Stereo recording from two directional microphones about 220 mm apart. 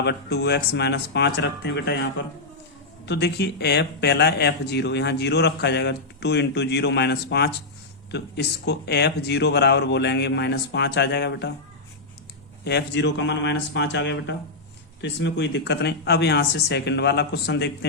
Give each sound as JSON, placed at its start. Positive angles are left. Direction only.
{"t": 0.0, "sound": "a man's voice", "side_deg": 50}
{"t": 12.6, "sound": "a man's voice", "side_deg": 50}